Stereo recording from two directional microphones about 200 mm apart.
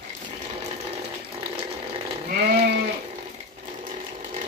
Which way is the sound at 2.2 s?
55° right (ahead or behind).